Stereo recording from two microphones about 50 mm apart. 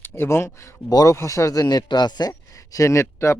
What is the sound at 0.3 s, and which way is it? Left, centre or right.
Speech, left.